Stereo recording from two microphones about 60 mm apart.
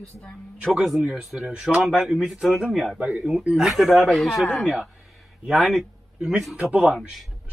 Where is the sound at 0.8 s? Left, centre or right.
Centre.